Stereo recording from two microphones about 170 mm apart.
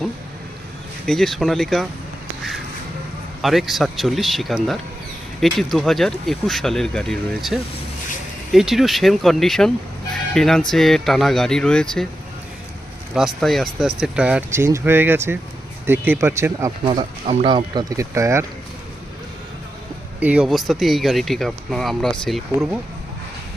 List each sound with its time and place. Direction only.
1.0 s speech: centre (ahead or behind)
3.4 s speech: centre (ahead or behind)
13.1 s speech: centre (ahead or behind); by 16.7 s 15° right (ahead or behind)
17.0 s speech: 30° right (ahead or behind)
20.1 s speech: 10° right (ahead or behind)